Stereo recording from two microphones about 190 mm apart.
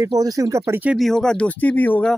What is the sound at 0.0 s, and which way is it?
Speech, 20° right (ahead or behind).